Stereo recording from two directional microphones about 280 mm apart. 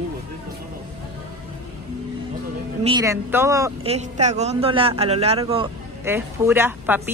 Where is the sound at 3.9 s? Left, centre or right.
Right.